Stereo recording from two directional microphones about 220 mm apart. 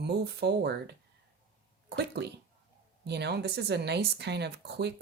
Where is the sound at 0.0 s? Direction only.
50° right (ahead or behind).